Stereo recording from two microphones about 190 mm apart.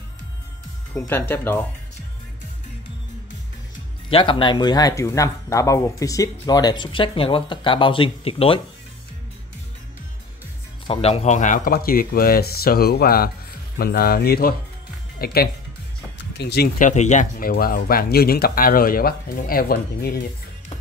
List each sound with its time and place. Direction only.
0.9 s speech: 10° left (ahead or behind)
4.1 s speech: 25° left (ahead or behind)
10.9 s speech: 30° left (ahead or behind); by 20.2 s 55° left (ahead or behind)